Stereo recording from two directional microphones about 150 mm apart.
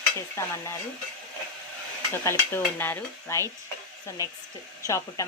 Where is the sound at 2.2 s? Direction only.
15° left (ahead or behind).